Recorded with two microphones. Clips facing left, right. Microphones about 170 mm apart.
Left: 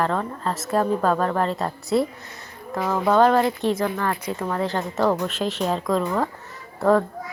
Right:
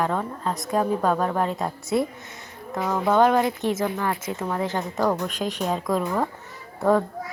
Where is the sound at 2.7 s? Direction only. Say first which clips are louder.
Left 1 dB; 15° right (ahead or behind).